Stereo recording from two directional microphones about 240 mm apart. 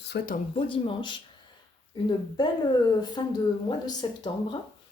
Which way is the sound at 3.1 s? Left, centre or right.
Centre.